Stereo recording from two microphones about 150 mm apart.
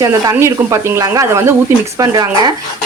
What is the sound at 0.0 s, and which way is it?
Speech, 20° right (ahead or behind).